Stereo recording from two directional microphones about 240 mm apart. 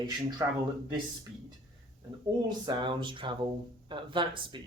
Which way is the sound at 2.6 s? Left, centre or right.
Centre.